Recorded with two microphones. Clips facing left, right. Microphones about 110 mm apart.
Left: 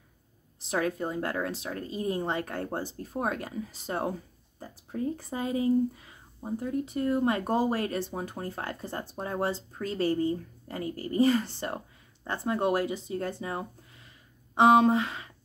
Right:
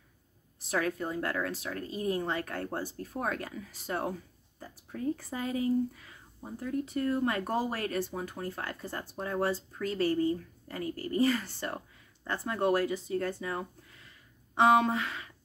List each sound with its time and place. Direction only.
0.6 s speech: 25° left (ahead or behind)